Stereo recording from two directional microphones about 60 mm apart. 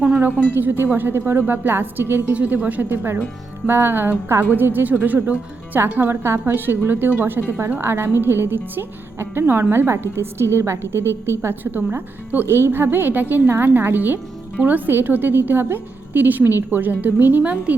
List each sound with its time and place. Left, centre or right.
0.5 s a woman's voice: right
2.3 s a woman's voice: right
11.6 s a woman's voice: right
12.5 s a woman's voice: right
17.5 s speech: centre